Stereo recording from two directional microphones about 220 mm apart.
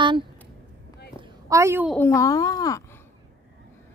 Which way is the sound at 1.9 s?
10° left (ahead or behind).